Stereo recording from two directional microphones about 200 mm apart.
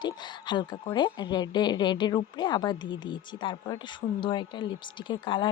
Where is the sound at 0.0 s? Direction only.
20° left (ahead or behind).